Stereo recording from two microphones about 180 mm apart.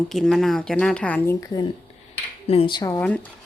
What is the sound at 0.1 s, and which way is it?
A woman's voice, centre (ahead or behind).